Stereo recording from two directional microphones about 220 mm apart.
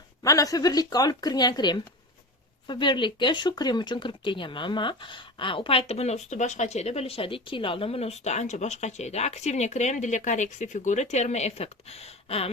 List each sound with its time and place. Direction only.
0.2 s speech: 15° left (ahead or behind)